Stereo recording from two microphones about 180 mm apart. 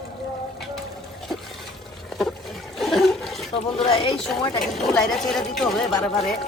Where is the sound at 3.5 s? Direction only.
30° left (ahead or behind).